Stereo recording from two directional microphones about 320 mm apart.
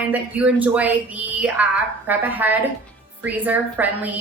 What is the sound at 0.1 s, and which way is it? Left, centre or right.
A woman's voice, centre.